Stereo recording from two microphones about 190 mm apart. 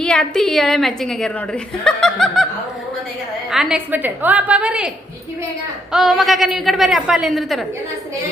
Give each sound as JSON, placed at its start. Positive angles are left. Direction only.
{"t": 0.0, "sound": "a woman's voice", "side_deg": 5}
{"t": 3.5, "sound": "a woman's voice", "side_deg": -5}
{"t": 5.9, "sound": "a woman's voice", "side_deg": 0}